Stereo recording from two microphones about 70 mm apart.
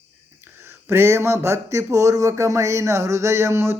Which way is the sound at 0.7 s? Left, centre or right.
Right.